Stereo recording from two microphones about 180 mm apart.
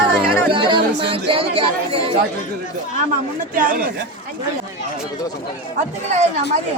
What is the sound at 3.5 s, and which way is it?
Speech, 50° right (ahead or behind).